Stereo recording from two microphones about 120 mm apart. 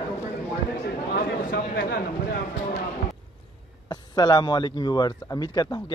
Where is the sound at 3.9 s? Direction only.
35° left (ahead or behind).